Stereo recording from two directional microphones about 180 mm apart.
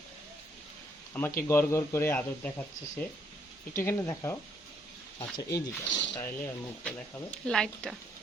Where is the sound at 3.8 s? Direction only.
15° left (ahead or behind).